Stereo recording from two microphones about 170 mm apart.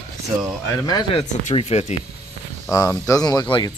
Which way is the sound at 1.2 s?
45° left (ahead or behind).